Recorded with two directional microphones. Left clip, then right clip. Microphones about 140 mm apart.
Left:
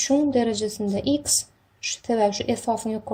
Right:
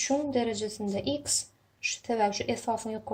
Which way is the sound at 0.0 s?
50° left (ahead or behind).